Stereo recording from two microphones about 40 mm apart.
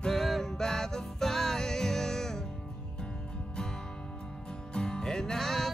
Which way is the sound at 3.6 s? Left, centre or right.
Centre.